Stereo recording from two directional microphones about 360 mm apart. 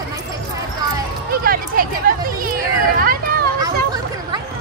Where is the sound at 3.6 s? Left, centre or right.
Centre.